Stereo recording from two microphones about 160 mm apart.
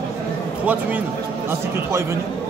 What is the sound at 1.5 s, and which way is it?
Speech, 15° right (ahead or behind).